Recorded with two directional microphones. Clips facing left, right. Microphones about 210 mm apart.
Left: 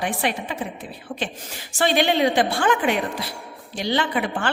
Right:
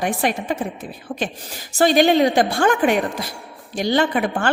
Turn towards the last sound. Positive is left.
turn(degrees=-45)  # may be behind; listen again after turning